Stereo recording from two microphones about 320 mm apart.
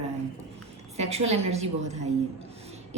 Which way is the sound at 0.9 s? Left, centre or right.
Centre.